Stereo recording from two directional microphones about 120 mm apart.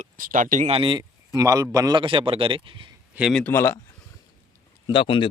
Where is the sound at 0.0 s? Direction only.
90° right.